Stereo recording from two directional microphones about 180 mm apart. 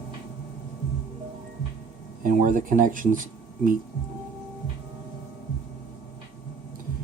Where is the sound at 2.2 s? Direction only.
45° right (ahead or behind).